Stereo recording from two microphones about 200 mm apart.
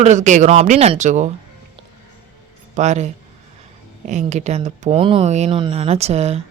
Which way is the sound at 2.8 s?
35° right (ahead or behind).